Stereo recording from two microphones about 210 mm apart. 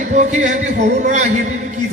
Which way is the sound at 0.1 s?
35° right (ahead or behind).